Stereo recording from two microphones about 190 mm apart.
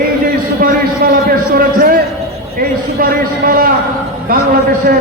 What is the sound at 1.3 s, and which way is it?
Speech, 50° right (ahead or behind).